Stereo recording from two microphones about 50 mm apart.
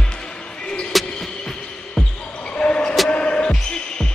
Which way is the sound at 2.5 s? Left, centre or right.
Left.